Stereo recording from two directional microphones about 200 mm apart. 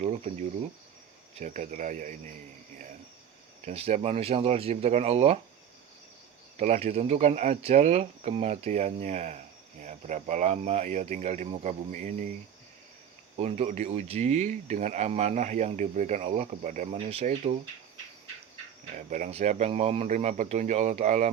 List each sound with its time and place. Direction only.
1.4 s speech: 40° right (ahead or behind)
3.7 s speech: 35° right (ahead or behind)
6.6 s speech: 35° right (ahead or behind)
13.3 s speech: 30° right (ahead or behind)
18.9 s speech: 35° right (ahead or behind)